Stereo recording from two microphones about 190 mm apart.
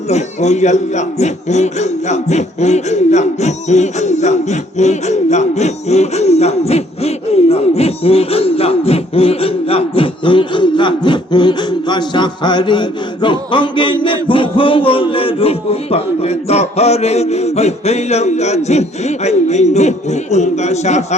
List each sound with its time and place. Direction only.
0.1 s a man's voice: 35° left (ahead or behind)